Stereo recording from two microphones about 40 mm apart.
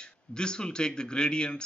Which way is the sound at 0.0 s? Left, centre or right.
Left.